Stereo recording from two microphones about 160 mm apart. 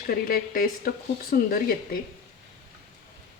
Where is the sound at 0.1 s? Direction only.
65° left (ahead or behind).